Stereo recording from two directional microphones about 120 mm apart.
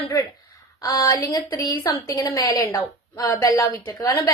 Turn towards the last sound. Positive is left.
turn(degrees=30)  # may be behind; listen again after turning